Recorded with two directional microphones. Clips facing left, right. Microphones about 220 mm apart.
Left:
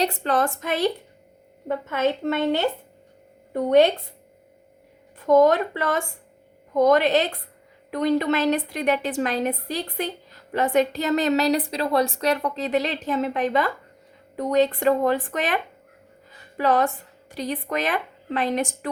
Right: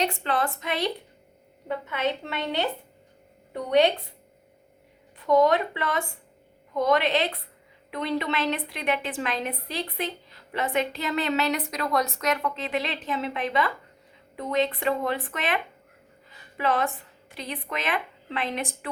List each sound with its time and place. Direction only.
0.0 s a woman's voice: 40° left (ahead or behind)
5.2 s a woman's voice: 45° left (ahead or behind)